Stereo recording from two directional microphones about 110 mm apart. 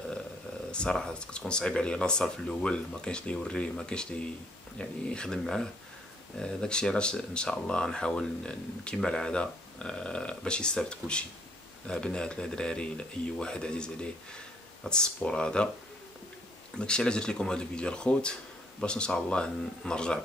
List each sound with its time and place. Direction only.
0.7 s speech: 10° left (ahead or behind)
16.7 s speech: 10° left (ahead or behind)